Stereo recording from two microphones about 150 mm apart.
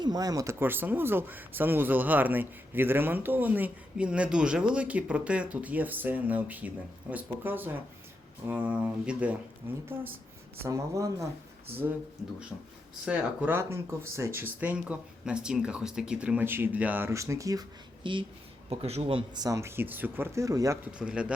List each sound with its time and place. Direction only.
0.0 s speech: 25° right (ahead or behind)
13.1 s speech: 10° right (ahead or behind); by 18.3 s 30° right (ahead or behind)
18.7 s speech: 45° right (ahead or behind); by 20.7 s 20° right (ahead or behind)
20.8 s speech: 5° right (ahead or behind)